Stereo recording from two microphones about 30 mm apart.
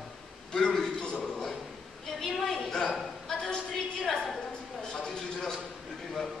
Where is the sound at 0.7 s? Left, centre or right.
Centre.